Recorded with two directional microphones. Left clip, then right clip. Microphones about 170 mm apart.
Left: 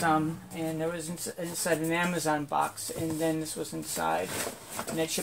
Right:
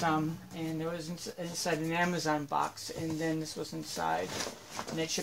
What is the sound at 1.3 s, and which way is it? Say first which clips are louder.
Speech: left 4 dB; 10° right (ahead or behind).